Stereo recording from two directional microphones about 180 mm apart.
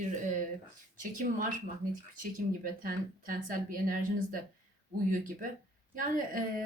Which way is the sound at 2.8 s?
50° right (ahead or behind).